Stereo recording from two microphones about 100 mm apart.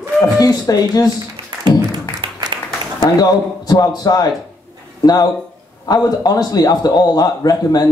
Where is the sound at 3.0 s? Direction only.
40° left (ahead or behind).